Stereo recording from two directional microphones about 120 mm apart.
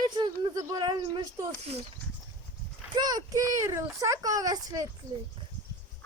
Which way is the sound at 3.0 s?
30° right (ahead or behind).